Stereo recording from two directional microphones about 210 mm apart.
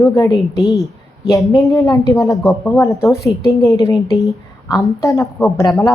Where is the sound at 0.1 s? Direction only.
15° left (ahead or behind).